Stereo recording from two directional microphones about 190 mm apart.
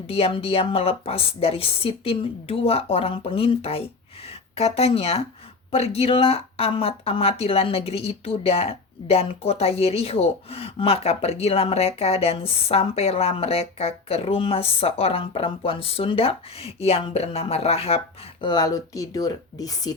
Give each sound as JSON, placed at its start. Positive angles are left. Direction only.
{"t": 0.1, "sound": "a woman's voice", "side_deg": 30}